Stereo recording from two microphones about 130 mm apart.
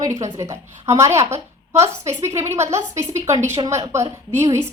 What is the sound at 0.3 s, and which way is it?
Speech, 25° right (ahead or behind).